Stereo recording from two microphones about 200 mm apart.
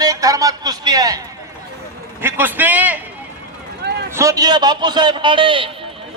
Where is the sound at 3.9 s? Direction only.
55° right (ahead or behind).